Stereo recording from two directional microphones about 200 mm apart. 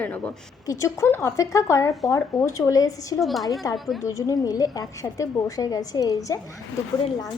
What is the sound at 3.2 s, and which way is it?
Speech, centre (ahead or behind).